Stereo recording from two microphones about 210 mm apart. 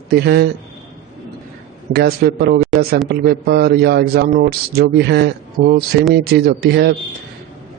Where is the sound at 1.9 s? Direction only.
50° right (ahead or behind).